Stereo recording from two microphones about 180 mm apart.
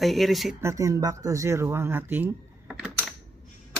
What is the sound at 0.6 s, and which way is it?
Speech, 15° right (ahead or behind).